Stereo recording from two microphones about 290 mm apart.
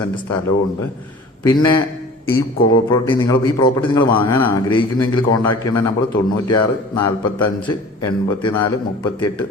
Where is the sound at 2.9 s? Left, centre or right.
Centre.